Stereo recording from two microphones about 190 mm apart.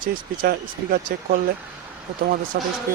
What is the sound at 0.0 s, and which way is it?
Speech, 50° right (ahead or behind).